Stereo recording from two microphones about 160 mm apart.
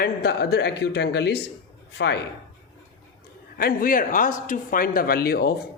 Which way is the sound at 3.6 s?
60° left (ahead or behind).